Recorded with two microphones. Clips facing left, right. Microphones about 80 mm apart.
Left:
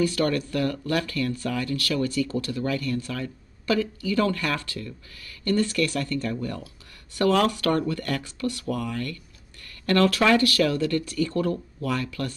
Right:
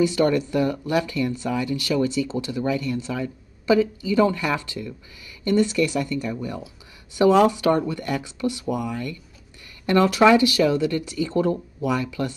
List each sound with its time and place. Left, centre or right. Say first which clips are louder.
0.0 s speech: right 4 dB; centre